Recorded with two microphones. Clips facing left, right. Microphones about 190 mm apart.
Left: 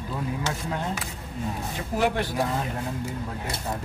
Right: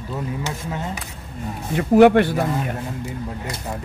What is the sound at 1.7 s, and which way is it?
Speech, 65° right (ahead or behind).